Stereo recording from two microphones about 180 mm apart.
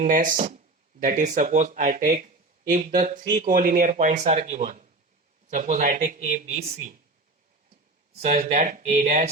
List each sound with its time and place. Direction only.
0.0 s speech: 50° right (ahead or behind)
8.2 s speech: 40° right (ahead or behind)